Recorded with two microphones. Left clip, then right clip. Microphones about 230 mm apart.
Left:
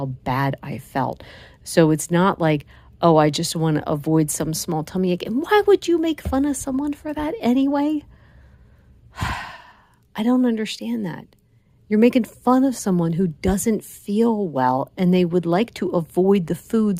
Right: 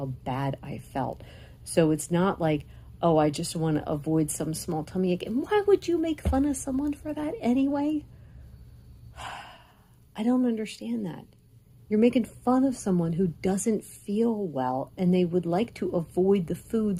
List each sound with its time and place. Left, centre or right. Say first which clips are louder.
0.0 s speech: left 8 dB; left
9.1 s speech: left 11 dB; left